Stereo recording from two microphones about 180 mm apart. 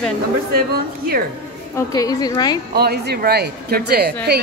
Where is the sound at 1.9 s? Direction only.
20° left (ahead or behind).